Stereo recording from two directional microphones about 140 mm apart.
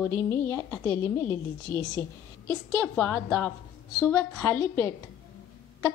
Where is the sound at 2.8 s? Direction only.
10° left (ahead or behind).